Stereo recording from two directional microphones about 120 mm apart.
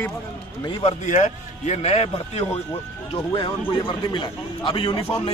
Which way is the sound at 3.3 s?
45° left (ahead or behind).